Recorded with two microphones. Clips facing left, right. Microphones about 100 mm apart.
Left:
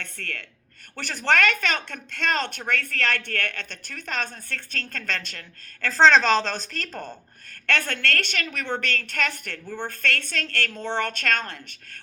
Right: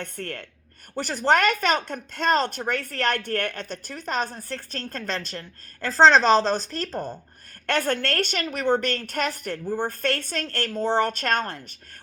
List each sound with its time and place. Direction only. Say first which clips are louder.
0.2 s a woman's voice: right 3 dB; 40° right (ahead or behind)
6.8 s speech: right 5 dB; 5° right (ahead or behind)
7.5 s a woman's voice: right 3 dB; 40° right (ahead or behind)